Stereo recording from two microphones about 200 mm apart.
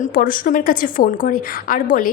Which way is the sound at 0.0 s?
45° left (ahead or behind).